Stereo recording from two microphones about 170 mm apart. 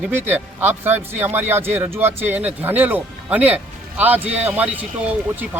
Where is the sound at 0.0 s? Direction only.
10° right (ahead or behind).